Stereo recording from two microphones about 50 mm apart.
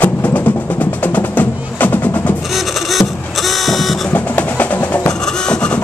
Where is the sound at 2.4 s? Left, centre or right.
Centre.